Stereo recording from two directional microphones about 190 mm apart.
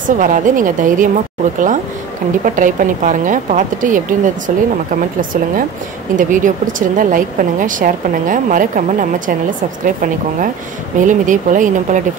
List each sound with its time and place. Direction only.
0.2 s speech: 45° right (ahead or behind)
6.1 s speech: 45° right (ahead or behind)
9.8 s speech: 45° right (ahead or behind)